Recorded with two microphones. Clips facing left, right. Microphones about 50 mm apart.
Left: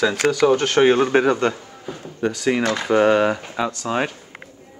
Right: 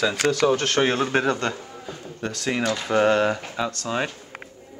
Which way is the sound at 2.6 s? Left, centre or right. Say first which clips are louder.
Left 3 dB; left.